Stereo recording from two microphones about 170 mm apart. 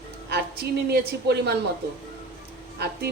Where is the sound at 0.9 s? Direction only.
75° right (ahead or behind).